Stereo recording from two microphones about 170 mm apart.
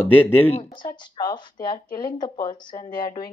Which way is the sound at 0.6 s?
25° left (ahead or behind).